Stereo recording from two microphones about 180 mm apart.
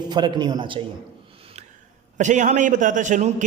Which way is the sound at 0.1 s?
25° right (ahead or behind).